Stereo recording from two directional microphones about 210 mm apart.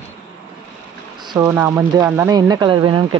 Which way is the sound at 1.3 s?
15° right (ahead or behind).